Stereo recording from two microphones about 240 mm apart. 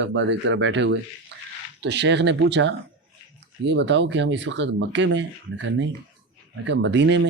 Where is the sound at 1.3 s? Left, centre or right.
Right.